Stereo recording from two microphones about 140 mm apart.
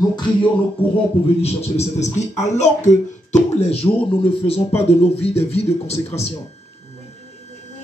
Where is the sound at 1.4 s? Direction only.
50° left (ahead or behind).